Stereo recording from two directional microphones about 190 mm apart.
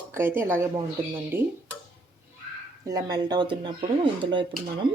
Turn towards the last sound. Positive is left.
turn(degrees=-25)  # may be behind; listen again after turning